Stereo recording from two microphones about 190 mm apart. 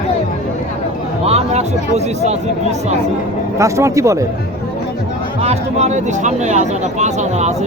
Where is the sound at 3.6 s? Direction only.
15° right (ahead or behind).